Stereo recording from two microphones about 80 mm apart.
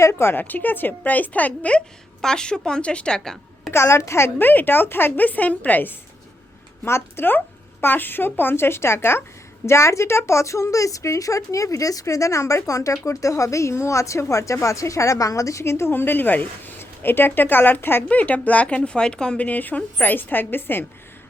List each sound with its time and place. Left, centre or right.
0.0 s a woman's voice: left; by 3.7 s centre
3.7 s a woman's voice: left